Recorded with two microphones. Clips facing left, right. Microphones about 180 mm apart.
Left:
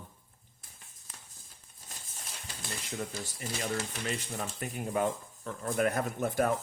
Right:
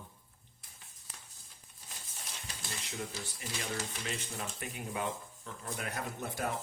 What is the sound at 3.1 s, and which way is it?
Speech, 45° left (ahead or behind).